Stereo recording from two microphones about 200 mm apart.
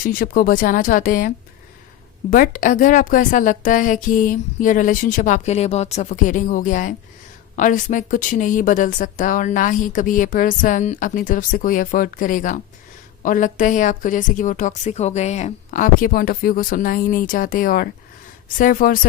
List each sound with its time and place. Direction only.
0.0 s speech: 45° left (ahead or behind)
2.3 s a woman's voice: 40° left (ahead or behind)